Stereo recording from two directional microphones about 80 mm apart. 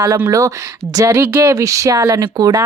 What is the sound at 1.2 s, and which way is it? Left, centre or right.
Speech, right.